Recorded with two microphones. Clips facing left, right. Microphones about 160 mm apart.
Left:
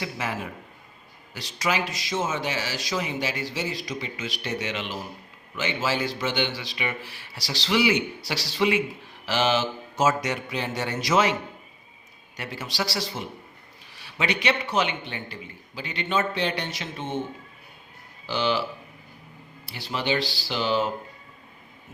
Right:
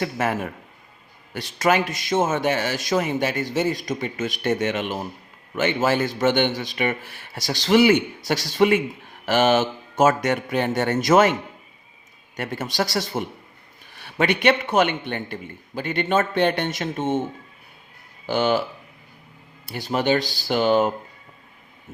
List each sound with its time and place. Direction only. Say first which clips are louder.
0.0 s a man's voice: right 7 dB; 50° right (ahead or behind)
12.4 s a man's voice: right 6 dB; 50° right (ahead or behind)
18.3 s a man's voice: right 5 dB; 50° right (ahead or behind)
19.6 s a man's voice: right 7 dB; 45° right (ahead or behind)